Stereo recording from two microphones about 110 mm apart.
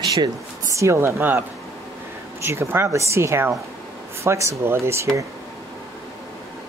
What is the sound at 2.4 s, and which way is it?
Speech, 25° right (ahead or behind).